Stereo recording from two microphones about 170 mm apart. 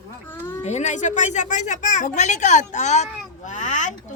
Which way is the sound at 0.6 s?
40° left (ahead or behind).